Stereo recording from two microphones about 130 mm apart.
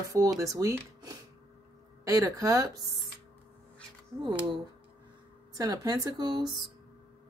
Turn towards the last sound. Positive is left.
turn(degrees=-35)  # may be behind; listen again after turning